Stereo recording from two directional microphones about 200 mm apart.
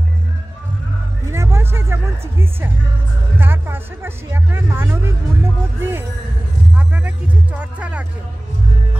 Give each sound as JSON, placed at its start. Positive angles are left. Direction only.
{"t": 1.3, "sound": "music", "side_deg": -15}
{"t": 3.3, "sound": "speech", "side_deg": -10}